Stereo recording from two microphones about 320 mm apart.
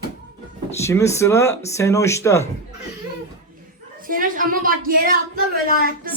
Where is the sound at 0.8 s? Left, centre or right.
Centre.